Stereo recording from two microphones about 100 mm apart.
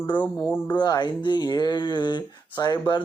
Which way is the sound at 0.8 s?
45° left (ahead or behind).